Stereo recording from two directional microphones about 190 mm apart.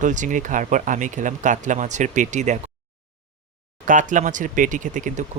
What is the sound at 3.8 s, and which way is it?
Speech, 45° right (ahead or behind).